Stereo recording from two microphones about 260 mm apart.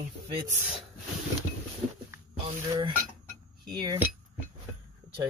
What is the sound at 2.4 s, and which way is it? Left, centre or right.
Speech, centre.